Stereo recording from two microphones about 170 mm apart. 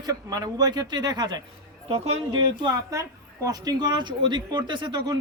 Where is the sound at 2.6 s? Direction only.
20° right (ahead or behind).